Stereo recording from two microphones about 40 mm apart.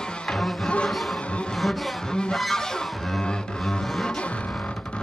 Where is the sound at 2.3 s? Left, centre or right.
Centre.